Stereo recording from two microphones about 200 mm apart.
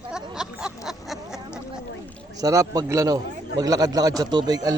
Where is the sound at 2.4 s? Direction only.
15° right (ahead or behind).